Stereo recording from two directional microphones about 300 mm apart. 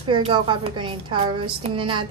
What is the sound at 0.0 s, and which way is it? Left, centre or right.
A woman's voice, centre.